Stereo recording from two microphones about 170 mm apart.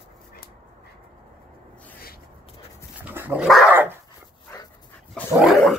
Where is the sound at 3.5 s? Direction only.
Centre (ahead or behind).